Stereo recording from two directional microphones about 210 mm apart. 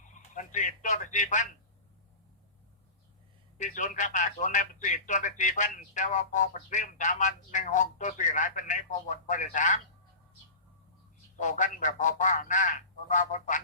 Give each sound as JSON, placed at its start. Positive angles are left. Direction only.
{"t": 0.1, "sound": "a man's voice", "side_deg": 35}
{"t": 3.6, "sound": "speech", "side_deg": 35}
{"t": 11.3, "sound": "speech", "side_deg": 35}